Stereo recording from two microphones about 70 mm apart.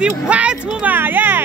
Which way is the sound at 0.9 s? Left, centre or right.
Right.